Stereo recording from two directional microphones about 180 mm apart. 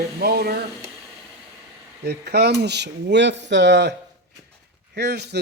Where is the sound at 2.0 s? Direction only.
65° right (ahead or behind).